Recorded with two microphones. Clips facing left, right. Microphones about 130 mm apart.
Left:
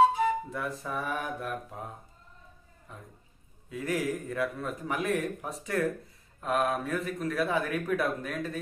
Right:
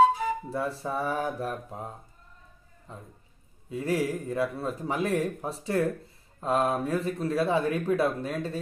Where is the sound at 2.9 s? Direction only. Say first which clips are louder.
Right 3 dB; 30° right (ahead or behind).